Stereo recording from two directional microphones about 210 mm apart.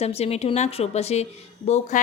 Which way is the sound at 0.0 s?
30° left (ahead or behind).